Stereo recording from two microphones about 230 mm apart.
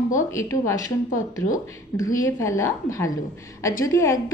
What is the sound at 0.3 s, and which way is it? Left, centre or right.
A woman's voice, centre.